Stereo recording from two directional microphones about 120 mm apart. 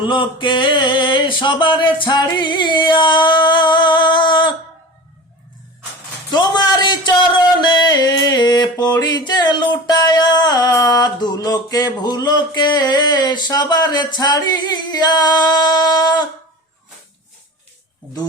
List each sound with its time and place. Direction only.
0.0 s speech: 45° left (ahead or behind)
6.3 s speech: 35° left (ahead or behind)